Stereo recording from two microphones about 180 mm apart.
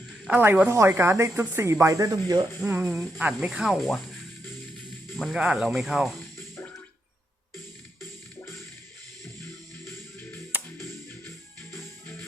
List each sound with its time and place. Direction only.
0.3 s speech: 10° right (ahead or behind)
2.6 s speech: 5° right (ahead or behind)
5.1 s speech: centre (ahead or behind)